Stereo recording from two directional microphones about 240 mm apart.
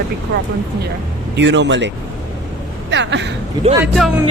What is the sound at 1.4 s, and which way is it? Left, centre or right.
Speech, right.